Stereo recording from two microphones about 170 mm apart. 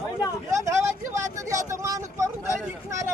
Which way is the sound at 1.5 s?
20° right (ahead or behind).